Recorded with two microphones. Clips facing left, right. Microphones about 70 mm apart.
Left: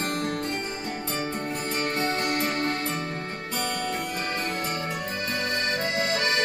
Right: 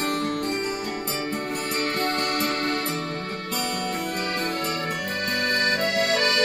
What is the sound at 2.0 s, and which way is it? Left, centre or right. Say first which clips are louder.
Music: right 1 dB; right.